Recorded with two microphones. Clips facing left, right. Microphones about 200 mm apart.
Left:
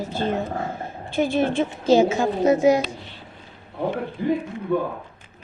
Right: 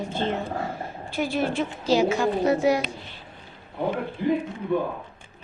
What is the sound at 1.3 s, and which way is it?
A woman's voice, 25° left (ahead or behind).